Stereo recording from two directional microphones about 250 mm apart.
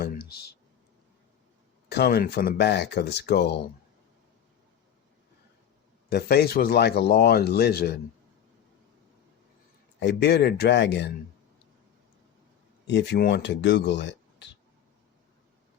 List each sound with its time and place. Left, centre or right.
0.0 s clicking: left
1.9 s speech: left
6.1 s speech: left
10.0 s speech: left
12.9 s speech: left